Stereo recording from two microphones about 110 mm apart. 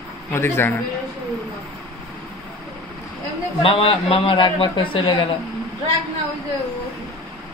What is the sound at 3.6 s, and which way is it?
A man's voice, 55° left (ahead or behind).